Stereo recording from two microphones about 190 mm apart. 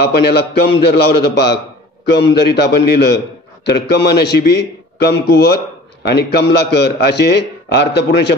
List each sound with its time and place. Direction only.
0.1 s a man's voice: 60° left (ahead or behind)